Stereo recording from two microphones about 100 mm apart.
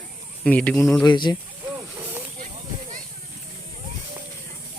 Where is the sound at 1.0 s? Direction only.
50° left (ahead or behind).